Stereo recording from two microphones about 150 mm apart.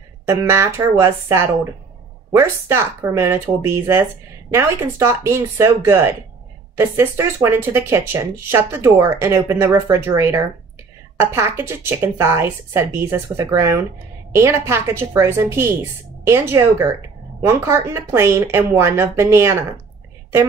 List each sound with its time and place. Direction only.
0.3 s speech: 15° right (ahead or behind)